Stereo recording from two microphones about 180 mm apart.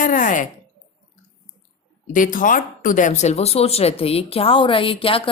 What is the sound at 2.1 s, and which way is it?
Speech, 45° left (ahead or behind).